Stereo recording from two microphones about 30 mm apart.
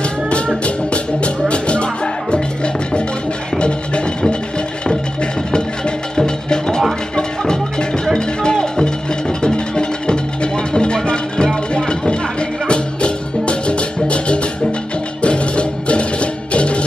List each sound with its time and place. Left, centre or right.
0.7 s music: left
5.5 s music: left
8.0 s music: left